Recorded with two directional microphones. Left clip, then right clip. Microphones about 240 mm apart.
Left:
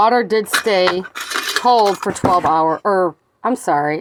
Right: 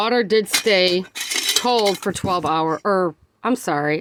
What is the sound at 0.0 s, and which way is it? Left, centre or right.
Speech, right.